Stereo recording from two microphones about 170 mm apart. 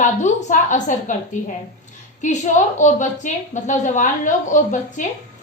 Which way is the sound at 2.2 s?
45° left (ahead or behind).